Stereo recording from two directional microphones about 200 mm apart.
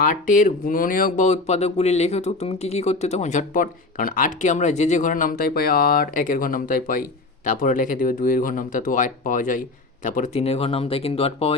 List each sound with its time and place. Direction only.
0.4 s speech: 45° left (ahead or behind)
10.2 s speech: 30° left (ahead or behind)